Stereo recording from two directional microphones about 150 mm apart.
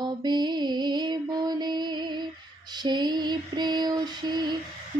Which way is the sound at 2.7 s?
30° right (ahead or behind).